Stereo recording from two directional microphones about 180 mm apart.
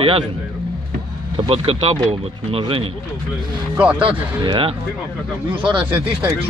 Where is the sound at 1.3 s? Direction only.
30° right (ahead or behind).